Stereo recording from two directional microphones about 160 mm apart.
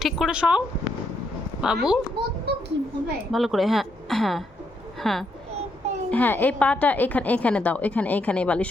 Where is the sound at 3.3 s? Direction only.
Centre (ahead or behind).